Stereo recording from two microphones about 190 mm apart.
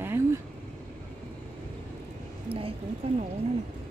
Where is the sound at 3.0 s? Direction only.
35° right (ahead or behind).